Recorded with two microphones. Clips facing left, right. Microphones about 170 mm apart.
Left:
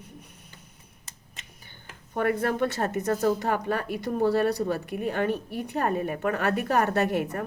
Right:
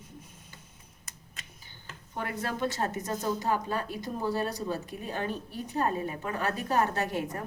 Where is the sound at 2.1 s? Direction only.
55° left (ahead or behind).